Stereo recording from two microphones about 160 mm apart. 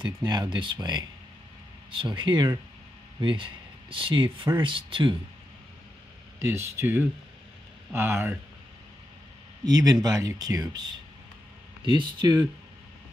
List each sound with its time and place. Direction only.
0.0 s speech: 25° right (ahead or behind)
6.4 s speech: 15° right (ahead or behind)
9.7 s speech: 25° right (ahead or behind)